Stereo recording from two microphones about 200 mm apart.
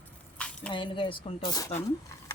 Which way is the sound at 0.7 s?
25° left (ahead or behind).